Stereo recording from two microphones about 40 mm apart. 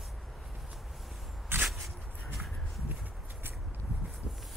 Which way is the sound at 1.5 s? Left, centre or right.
Right.